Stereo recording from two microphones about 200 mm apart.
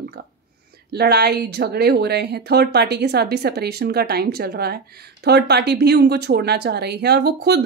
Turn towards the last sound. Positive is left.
turn(degrees=-55)  # may be behind; listen again after turning